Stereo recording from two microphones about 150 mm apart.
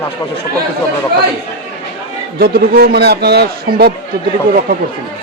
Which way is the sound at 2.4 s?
90° right.